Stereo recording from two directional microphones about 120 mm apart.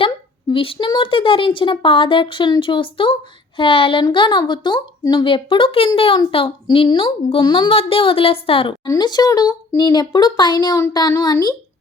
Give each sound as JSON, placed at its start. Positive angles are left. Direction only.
{"t": 0.5, "sound": "a woman's voice", "side_deg": 45}
{"t": 8.9, "sound": "speech", "side_deg": 35}